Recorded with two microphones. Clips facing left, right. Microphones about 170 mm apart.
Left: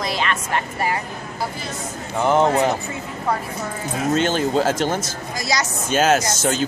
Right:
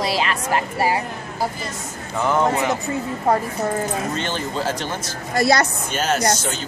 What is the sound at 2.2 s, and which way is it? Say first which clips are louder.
Speech: left 3 dB; 25° left (ahead or behind).